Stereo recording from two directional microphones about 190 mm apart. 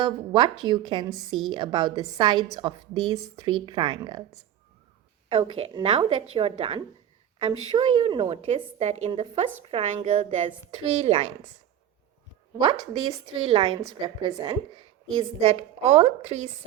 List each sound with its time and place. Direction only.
0.0 s a woman's voice: 25° right (ahead or behind)
5.3 s a woman's voice: 25° right (ahead or behind)
12.8 s a woman's voice: 20° right (ahead or behind)